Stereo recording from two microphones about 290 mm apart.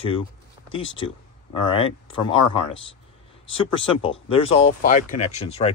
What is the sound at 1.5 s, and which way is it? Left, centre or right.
Speech, centre.